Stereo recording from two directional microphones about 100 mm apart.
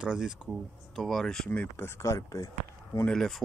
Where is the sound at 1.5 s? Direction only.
20° left (ahead or behind).